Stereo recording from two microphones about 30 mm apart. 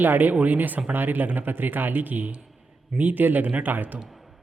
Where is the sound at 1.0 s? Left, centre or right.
Right.